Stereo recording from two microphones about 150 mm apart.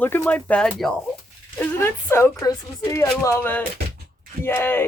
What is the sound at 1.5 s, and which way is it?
A woman's voice, 15° left (ahead or behind).